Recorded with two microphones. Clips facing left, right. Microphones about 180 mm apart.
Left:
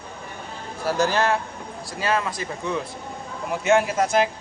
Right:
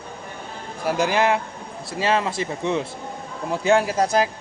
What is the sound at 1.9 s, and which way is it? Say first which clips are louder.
Speech: right 3 dB; 25° right (ahead or behind).